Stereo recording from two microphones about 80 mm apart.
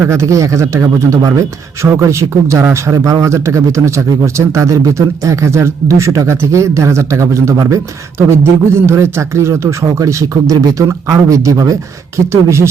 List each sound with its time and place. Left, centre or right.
0.0 s speech: right